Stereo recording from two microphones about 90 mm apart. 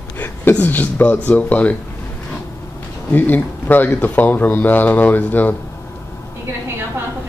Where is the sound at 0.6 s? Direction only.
20° left (ahead or behind).